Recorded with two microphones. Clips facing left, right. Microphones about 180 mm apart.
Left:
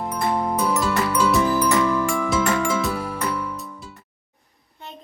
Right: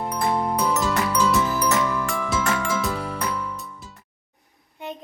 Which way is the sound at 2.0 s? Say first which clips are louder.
Left 3 dB; centre (ahead or behind).